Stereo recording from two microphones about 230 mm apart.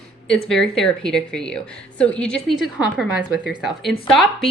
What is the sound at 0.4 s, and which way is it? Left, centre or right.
A woman's voice, centre.